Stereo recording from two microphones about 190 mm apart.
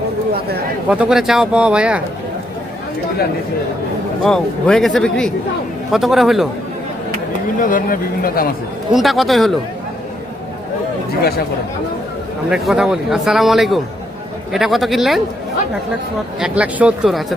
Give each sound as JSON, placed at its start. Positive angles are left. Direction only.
{"t": 0.9, "sound": "a man's voice", "side_deg": -5}
{"t": 4.2, "sound": "a man's voice", "side_deg": 5}
{"t": 7.6, "sound": "speech", "side_deg": 45}
{"t": 8.9, "sound": "a man's voice", "side_deg": 0}
{"t": 11.2, "sound": "speech", "side_deg": 55}
{"t": 12.5, "sound": "a man's voice", "side_deg": 0}
{"t": 16.4, "sound": "a man's voice", "side_deg": -5}